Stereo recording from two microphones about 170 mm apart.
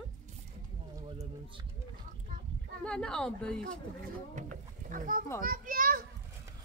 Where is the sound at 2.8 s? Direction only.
5° left (ahead or behind).